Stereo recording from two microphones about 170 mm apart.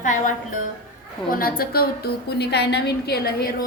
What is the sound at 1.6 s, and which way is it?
A woman's voice, 65° left (ahead or behind).